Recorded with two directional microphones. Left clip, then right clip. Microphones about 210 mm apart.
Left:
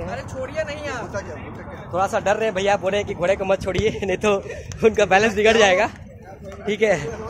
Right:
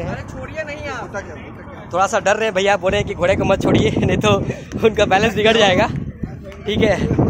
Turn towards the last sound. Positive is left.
turn(degrees=-5)  # may be behind; listen again after turning